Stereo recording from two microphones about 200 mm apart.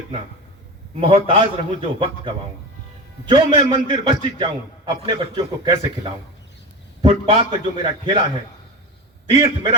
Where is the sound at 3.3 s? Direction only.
25° right (ahead or behind).